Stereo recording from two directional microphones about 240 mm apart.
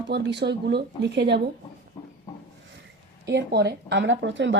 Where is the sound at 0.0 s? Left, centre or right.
Right.